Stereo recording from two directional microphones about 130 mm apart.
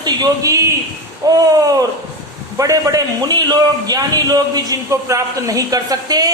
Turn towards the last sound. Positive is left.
turn(degrees=-30)  # may be behind; listen again after turning